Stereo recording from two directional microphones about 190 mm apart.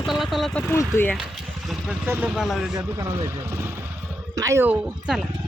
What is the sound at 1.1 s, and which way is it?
Speech, 5° right (ahead or behind).